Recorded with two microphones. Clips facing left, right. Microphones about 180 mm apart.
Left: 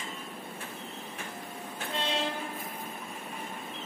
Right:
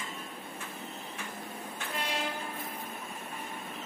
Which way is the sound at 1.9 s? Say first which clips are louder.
Left 3 dB; 25° left (ahead or behind).